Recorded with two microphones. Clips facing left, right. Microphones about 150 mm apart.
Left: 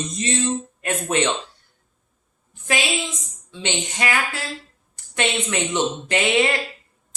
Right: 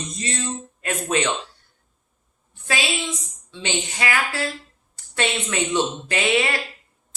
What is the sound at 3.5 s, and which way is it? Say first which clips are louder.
Speech: left 1 dB; 20° left (ahead or behind).